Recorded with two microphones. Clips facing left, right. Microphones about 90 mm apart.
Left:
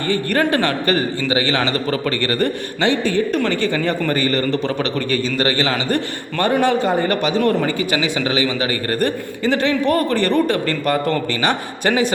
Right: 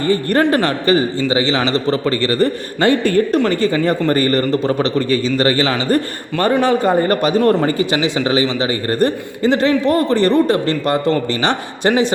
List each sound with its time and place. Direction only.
0.1 s a man's voice: 35° right (ahead or behind)
2.8 s a man's voice: 50° right (ahead or behind)
3.3 s a man's voice: 35° right (ahead or behind)